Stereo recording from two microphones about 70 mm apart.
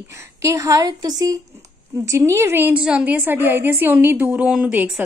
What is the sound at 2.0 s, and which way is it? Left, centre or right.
Speech, right.